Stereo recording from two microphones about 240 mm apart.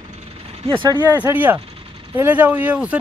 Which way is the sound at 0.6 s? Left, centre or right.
Right.